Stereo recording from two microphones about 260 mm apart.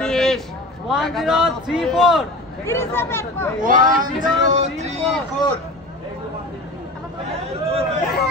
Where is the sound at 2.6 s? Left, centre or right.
Centre.